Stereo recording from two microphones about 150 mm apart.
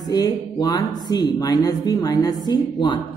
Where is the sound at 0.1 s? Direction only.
25° left (ahead or behind).